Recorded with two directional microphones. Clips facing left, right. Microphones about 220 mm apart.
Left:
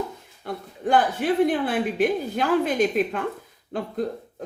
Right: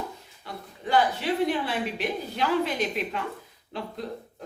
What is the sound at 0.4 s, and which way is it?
A woman's voice, 50° left (ahead or behind).